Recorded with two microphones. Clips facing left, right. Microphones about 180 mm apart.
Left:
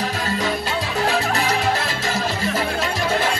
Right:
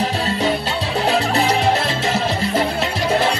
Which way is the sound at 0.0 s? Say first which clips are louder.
Right 4 dB; 30° right (ahead or behind).